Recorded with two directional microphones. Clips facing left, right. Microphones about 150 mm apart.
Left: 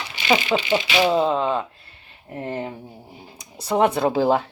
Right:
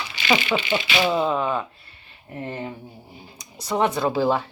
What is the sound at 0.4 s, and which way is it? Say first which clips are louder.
Speech: left 3 dB; 35° left (ahead or behind).